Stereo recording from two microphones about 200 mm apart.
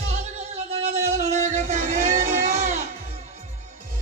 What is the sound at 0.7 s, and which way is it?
Music, 30° right (ahead or behind).